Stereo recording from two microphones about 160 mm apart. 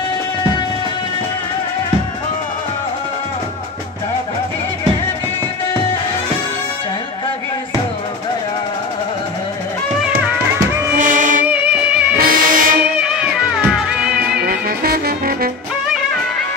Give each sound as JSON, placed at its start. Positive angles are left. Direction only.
{"t": 11.0, "sound": "music", "side_deg": -55}
{"t": 11.4, "sound": "music", "side_deg": -10}
{"t": 12.2, "sound": "music", "side_deg": -65}
{"t": 13.0, "sound": "music", "side_deg": -5}
{"t": 14.4, "sound": "saxophone", "side_deg": -70}